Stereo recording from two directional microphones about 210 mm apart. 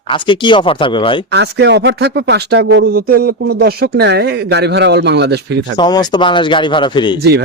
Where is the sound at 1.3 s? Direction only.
55° right (ahead or behind).